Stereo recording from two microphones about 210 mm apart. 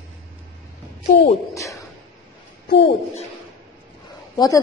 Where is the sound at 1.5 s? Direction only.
15° left (ahead or behind).